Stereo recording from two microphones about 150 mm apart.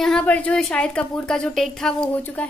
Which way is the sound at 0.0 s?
5° left (ahead or behind).